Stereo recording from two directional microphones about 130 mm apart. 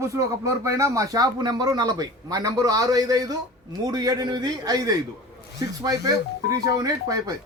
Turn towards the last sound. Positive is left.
turn(degrees=-25)  # may be behind; listen again after turning